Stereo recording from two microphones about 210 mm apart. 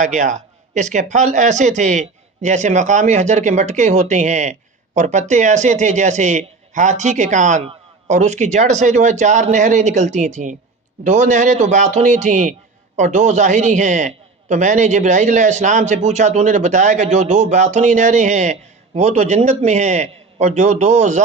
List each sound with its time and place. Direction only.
0.0 s a man's voice: 35° right (ahead or behind)